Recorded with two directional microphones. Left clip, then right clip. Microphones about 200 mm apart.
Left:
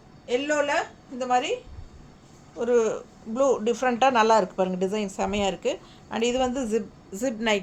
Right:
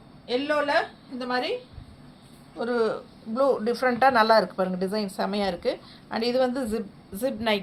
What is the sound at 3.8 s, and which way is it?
A woman's voice, 30° left (ahead or behind).